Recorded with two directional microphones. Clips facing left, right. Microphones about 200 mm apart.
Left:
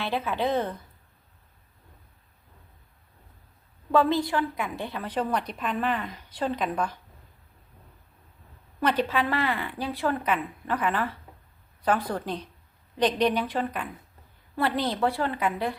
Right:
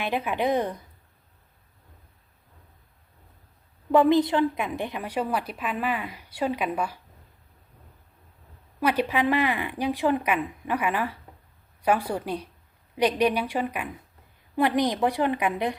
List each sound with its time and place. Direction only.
0.0 s a woman's voice: 15° right (ahead or behind)
3.9 s a woman's voice: 20° right (ahead or behind)
8.8 s a woman's voice: 10° right (ahead or behind)